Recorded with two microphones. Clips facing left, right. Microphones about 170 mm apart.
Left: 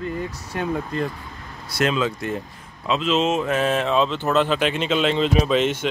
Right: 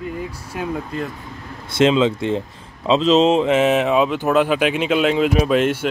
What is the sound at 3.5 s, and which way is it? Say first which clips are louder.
Speech: right 5 dB; 20° right (ahead or behind).